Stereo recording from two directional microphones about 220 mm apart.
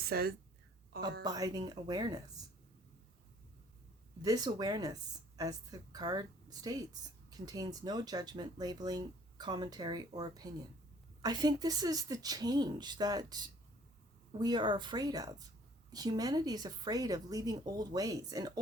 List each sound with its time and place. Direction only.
0.1 s a woman's voice: 45° right (ahead or behind)
1.2 s speech: 15° right (ahead or behind)
4.2 s a woman's voice: 15° right (ahead or behind)